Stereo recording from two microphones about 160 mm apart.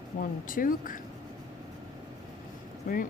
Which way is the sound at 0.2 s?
60° left (ahead or behind).